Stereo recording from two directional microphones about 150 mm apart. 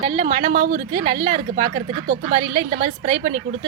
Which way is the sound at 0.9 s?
30° right (ahead or behind).